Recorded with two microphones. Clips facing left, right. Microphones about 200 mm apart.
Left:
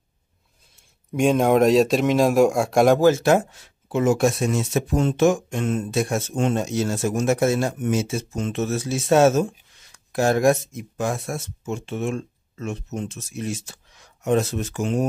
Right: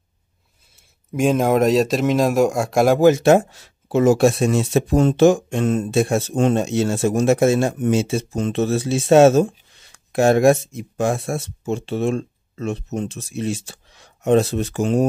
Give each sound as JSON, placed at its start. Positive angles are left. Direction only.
{"t": 1.1, "sound": "speech", "side_deg": 0}
{"t": 3.0, "sound": "a man's voice", "side_deg": -15}